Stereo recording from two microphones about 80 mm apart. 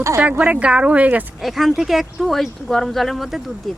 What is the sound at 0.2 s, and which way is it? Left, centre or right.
Speech, centre.